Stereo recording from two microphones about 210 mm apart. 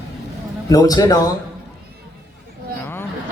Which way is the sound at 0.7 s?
15° left (ahead or behind).